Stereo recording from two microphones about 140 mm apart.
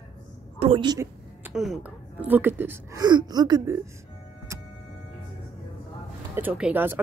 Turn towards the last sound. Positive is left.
turn(degrees=-15)  # may be behind; listen again after turning